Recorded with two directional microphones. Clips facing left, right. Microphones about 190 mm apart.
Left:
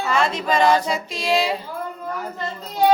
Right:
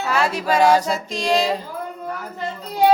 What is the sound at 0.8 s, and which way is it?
A capella, 45° right (ahead or behind).